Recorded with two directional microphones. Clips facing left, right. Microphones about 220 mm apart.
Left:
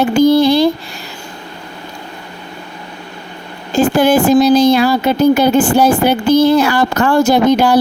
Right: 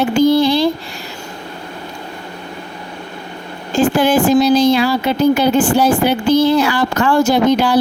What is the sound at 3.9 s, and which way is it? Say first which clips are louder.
Speech: left 3 dB; 40° left (ahead or behind).